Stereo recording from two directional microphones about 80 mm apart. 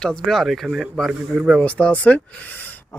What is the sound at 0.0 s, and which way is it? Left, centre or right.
Speech, centre.